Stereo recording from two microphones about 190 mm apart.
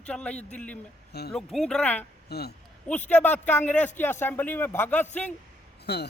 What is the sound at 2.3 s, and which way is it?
Speech, 60° left (ahead or behind).